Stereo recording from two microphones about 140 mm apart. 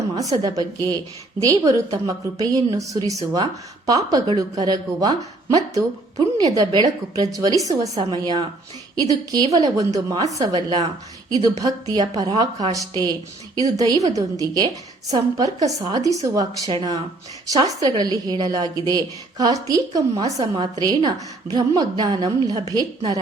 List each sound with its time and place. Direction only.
0.2 s speech: 25° right (ahead or behind)